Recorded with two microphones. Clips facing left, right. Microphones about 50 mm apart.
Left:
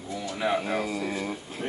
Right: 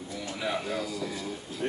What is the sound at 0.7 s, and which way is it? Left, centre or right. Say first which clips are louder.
Speech: left 4 dB; left.